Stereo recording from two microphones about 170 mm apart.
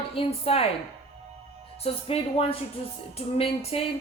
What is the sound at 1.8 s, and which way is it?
Speech, 35° left (ahead or behind).